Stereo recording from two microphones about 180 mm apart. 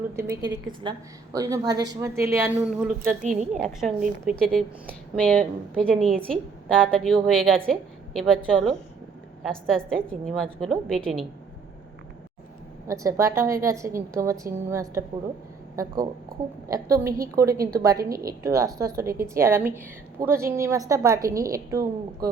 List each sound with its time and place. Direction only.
0.2 s a woman's voice: 20° right (ahead or behind)
3.2 s a woman's voice: 45° right (ahead or behind)
3.6 s a woman's voice: 5° right (ahead or behind)
12.9 s a woman's voice: 15° right (ahead or behind)
17.1 s a woman's voice: 55° right (ahead or behind)
17.4 s a woman's voice: 15° right (ahead or behind)